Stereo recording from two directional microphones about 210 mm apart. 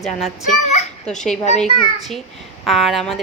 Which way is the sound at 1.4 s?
30° left (ahead or behind).